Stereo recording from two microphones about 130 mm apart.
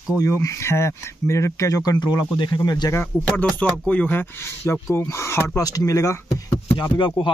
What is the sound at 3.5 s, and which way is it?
Speech, 10° left (ahead or behind).